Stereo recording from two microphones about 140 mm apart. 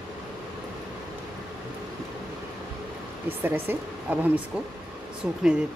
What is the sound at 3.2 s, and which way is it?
Speech, 15° right (ahead or behind).